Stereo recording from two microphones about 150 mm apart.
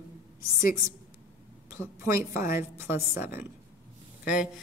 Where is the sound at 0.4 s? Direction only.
20° right (ahead or behind).